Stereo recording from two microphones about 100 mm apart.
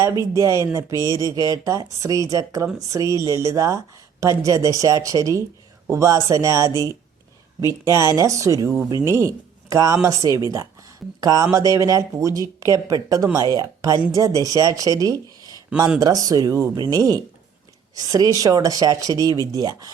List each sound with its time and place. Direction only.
0.0 s speech: 30° right (ahead or behind)
16.7 s speech: 40° right (ahead or behind)